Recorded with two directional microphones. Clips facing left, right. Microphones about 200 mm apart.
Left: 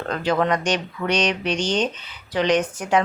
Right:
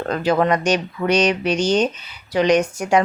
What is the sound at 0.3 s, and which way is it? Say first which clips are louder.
Speech: right 3 dB; 10° right (ahead or behind).